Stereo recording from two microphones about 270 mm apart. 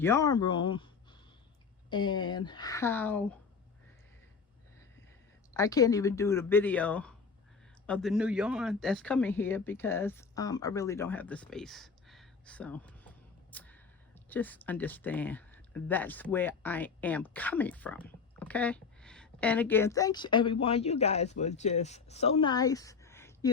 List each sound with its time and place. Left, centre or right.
0.0 s speech: centre
1.9 s speech: centre
5.5 s speech: centre